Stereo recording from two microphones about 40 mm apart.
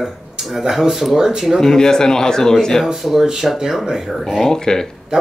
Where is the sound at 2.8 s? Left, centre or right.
Centre.